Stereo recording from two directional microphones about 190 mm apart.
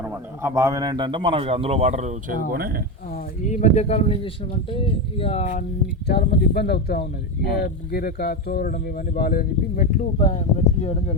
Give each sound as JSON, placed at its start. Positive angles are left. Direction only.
{"t": 0.0, "sound": "a man's voice", "side_deg": -15}
{"t": 2.5, "sound": "speech", "side_deg": -50}
{"t": 3.4, "sound": "speech", "side_deg": 40}
{"t": 6.1, "sound": "speech", "side_deg": 60}